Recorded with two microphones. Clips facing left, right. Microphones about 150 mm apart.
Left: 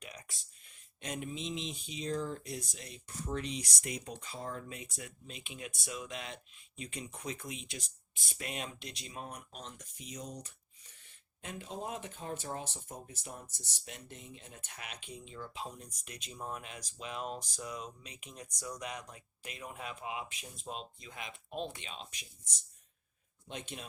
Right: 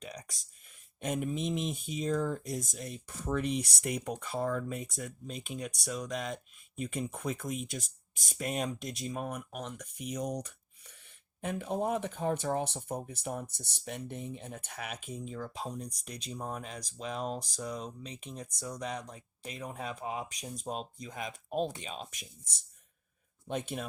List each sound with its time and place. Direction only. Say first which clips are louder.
0.0 s a sound: right 5 dB; 35° right (ahead or behind)
1.0 s speech: right 7 dB; 50° right (ahead or behind)
23.5 s speech: right 9 dB; 50° right (ahead or behind)